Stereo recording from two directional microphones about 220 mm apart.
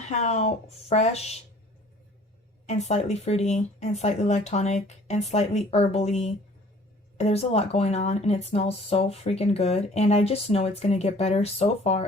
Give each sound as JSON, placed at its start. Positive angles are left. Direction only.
{"t": 0.1, "sound": "speech", "side_deg": 30}
{"t": 2.6, "sound": "speech", "side_deg": 30}